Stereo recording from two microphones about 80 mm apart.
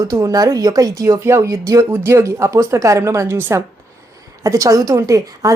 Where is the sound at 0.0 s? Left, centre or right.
Right.